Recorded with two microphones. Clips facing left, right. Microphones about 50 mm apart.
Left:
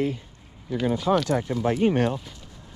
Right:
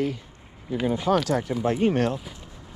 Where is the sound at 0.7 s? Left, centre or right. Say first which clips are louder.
Even; centre.